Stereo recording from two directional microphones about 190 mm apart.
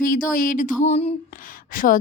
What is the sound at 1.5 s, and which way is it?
Speech, 45° left (ahead or behind).